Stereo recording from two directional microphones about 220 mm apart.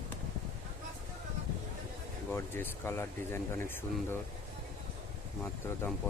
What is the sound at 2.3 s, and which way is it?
Speech, 10° left (ahead or behind).